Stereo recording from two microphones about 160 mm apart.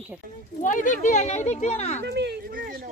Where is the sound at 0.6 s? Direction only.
55° left (ahead or behind).